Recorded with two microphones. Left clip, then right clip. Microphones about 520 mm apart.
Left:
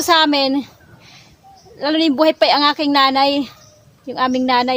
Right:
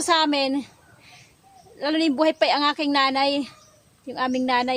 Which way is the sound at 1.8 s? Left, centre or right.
Right.